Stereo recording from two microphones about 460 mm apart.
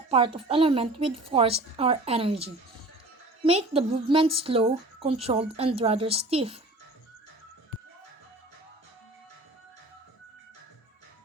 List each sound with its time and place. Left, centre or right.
0.3 s a woman's voice: centre